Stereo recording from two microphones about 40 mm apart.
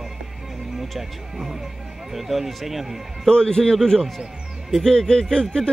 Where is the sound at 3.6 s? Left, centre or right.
Centre.